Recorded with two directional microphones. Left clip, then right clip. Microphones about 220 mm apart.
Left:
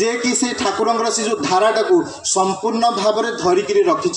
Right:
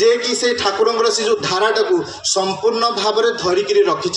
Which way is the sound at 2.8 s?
50° left (ahead or behind).